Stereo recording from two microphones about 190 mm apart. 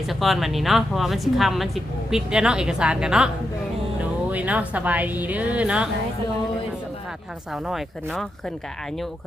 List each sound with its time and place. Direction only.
0.1 s speech: centre (ahead or behind)
4.3 s a woman's voice: 10° right (ahead or behind)
7.5 s speech: centre (ahead or behind)